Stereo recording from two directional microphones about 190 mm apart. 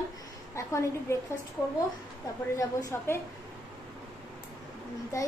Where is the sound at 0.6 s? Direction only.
15° left (ahead or behind).